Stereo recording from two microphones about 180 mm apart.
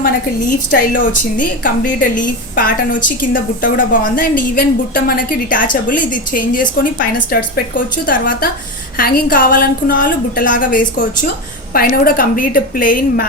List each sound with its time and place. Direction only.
0.9 s a woman's voice: 50° left (ahead or behind)